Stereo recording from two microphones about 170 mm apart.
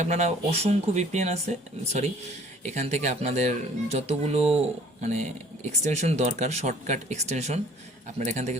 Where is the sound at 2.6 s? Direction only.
45° right (ahead or behind).